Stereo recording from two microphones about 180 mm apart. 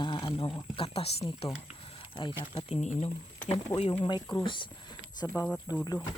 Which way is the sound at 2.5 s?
35° left (ahead or behind).